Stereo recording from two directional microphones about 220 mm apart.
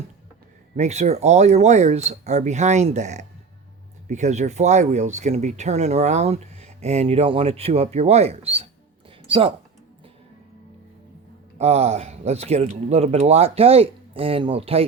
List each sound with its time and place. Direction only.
0.8 s speech: 30° right (ahead or behind)
11.5 s speech: 30° right (ahead or behind)